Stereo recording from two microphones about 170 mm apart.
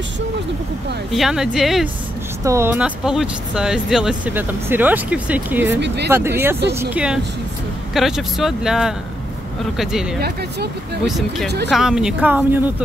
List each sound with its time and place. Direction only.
1.1 s speech: centre (ahead or behind)
2.4 s speech: 15° right (ahead or behind)